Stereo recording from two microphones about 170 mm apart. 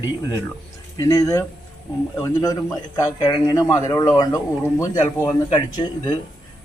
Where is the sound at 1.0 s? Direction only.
20° left (ahead or behind).